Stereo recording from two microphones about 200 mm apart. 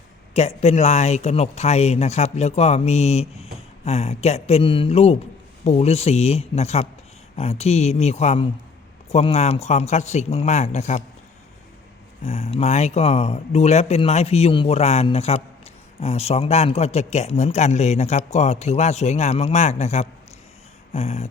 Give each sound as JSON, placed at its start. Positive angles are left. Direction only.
{"t": 0.3, "sound": "speech", "side_deg": 35}
{"t": 12.2, "sound": "speech", "side_deg": 30}